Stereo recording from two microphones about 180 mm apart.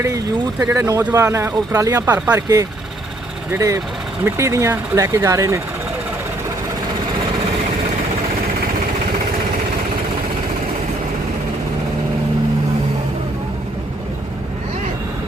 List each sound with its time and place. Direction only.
0.6 s speech: 15° right (ahead or behind)